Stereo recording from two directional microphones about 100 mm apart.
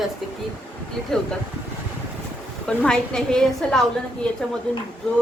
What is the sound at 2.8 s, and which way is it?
A woman's voice, 5° left (ahead or behind).